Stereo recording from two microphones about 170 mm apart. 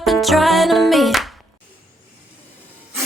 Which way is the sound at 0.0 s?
Centre (ahead or behind).